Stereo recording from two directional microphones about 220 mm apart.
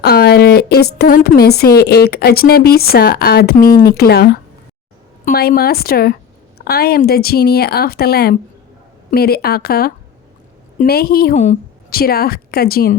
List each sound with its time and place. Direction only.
0.0 s a woman's voice: 45° left (ahead or behind)